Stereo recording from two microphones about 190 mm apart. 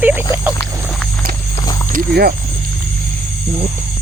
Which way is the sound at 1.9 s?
55° right (ahead or behind).